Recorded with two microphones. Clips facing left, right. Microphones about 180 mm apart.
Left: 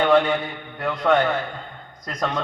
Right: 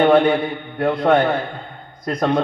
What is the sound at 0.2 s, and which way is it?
Speech, 30° right (ahead or behind).